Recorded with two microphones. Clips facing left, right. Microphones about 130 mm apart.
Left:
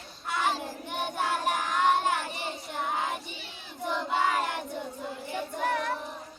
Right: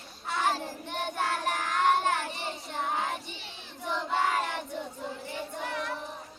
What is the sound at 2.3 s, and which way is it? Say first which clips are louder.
Child singing: left 1 dB; 15° left (ahead or behind).